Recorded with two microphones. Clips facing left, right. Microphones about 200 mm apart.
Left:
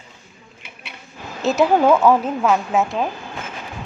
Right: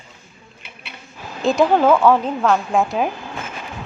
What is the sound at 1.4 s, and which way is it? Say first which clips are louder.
Speech: right 1 dB; 5° left (ahead or behind).